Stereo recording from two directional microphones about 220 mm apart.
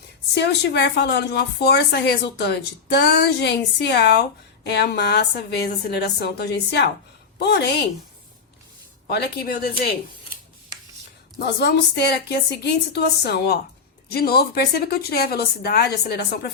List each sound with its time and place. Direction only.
0.3 s a woman's voice: 50° left (ahead or behind)
9.0 s a woman's voice: 45° left (ahead or behind)
11.3 s a woman's voice: 50° left (ahead or behind)